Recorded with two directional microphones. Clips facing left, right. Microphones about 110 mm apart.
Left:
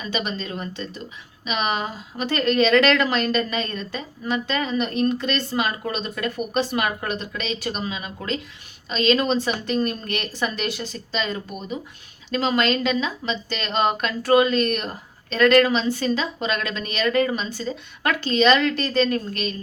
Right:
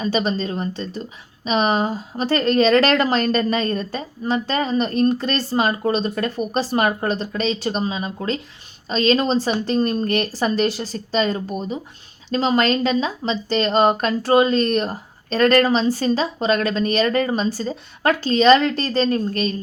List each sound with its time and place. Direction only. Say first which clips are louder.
0.0 s speech: right 7 dB; 35° right (ahead or behind)